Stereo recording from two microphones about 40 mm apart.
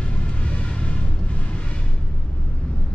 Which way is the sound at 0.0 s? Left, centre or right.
Left.